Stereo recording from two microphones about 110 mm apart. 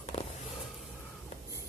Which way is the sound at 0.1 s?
65° left (ahead or behind).